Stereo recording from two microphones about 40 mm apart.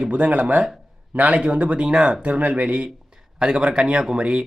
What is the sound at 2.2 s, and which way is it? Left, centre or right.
Speech, right.